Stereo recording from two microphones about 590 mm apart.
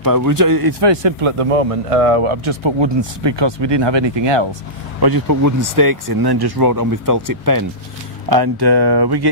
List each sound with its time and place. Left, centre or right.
0.0 s speech: right